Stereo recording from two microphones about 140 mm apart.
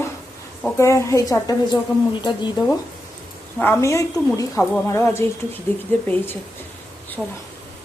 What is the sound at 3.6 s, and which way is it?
A woman's voice, 20° left (ahead or behind).